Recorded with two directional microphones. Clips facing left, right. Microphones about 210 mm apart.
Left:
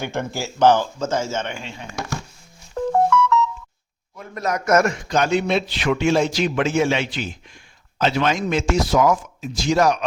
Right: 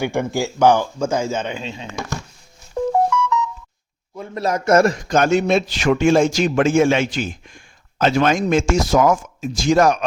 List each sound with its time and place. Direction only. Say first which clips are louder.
0.0 s a man's voice: right 6 dB; 15° right (ahead or behind)
2.7 s music: even; 15° right (ahead or behind)
4.2 s a man's voice: right 3 dB; 30° right (ahead or behind)
5.0 s a man's voice: right 3 dB; 50° right (ahead or behind)